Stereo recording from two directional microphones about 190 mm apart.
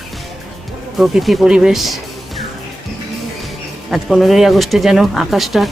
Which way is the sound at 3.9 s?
Centre (ahead or behind).